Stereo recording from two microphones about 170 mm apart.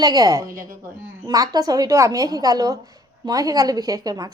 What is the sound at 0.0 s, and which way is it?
A woman's voice, 20° right (ahead or behind).